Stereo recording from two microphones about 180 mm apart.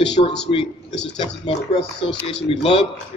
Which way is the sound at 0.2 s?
40° left (ahead or behind).